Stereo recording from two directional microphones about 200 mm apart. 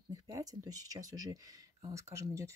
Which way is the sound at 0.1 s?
20° right (ahead or behind).